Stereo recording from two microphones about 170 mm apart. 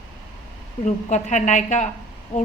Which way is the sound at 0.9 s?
45° left (ahead or behind).